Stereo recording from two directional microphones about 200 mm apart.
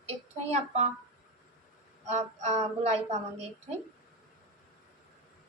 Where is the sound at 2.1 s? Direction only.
35° right (ahead or behind).